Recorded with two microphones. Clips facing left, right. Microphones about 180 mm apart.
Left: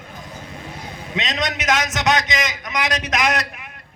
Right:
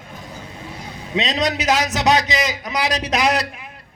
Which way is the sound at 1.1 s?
35° right (ahead or behind).